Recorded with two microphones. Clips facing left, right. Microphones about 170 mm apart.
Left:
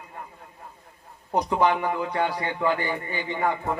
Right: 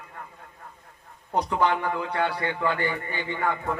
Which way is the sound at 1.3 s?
15° left (ahead or behind).